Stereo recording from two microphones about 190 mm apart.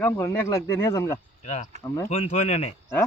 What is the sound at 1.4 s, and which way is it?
Speech, 40° left (ahead or behind).